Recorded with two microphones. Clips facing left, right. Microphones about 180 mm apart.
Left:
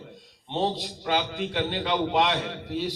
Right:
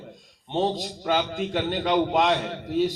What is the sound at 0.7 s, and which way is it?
A man's voice, 45° right (ahead or behind).